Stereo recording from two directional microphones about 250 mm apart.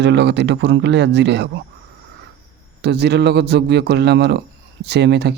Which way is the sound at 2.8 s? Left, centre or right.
Right.